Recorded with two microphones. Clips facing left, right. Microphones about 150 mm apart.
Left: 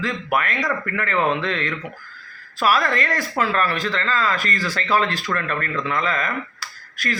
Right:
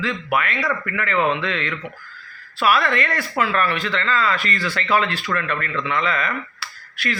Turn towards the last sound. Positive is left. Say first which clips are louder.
# right 1 dB
turn(degrees=40)  # may be behind; listen again after turning